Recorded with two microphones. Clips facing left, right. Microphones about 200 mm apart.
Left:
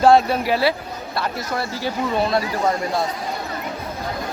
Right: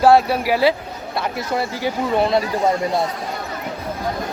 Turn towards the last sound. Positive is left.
turn(degrees=-20)  # may be behind; listen again after turning